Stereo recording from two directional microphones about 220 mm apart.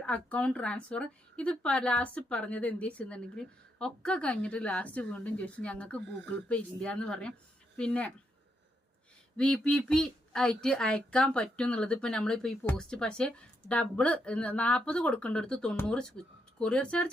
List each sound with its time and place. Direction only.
0.0 s a woman's voice: 5° left (ahead or behind)
9.4 s a woman's voice: 5° left (ahead or behind)